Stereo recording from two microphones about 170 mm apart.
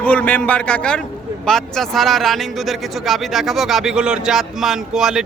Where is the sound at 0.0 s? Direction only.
10° left (ahead or behind).